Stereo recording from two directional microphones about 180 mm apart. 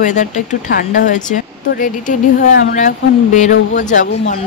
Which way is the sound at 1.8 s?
45° left (ahead or behind).